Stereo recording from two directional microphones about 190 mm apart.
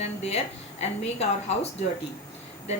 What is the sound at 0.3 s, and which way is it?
A woman's voice, 35° left (ahead or behind).